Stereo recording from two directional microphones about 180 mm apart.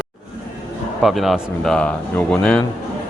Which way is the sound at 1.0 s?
Centre (ahead or behind).